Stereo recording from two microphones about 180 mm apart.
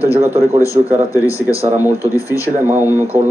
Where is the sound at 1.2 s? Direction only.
15° left (ahead or behind).